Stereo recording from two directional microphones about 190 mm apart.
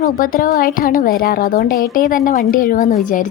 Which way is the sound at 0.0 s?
50° left (ahead or behind).